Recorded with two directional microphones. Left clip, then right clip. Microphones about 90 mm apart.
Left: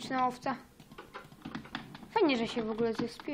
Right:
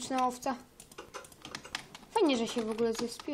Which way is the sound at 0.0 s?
30° right (ahead or behind).